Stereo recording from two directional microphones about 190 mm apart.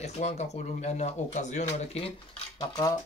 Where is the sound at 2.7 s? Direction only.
20° left (ahead or behind).